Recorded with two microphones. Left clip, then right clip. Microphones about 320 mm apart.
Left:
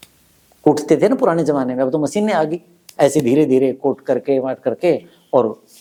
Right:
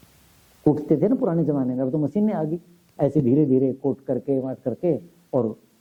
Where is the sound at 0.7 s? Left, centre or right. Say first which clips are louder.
Left 7 dB; centre.